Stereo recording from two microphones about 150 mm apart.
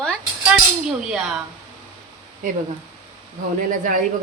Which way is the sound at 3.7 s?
65° right (ahead or behind).